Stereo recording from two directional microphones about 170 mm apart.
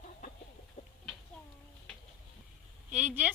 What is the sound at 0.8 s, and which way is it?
Chicken, 40° left (ahead or behind).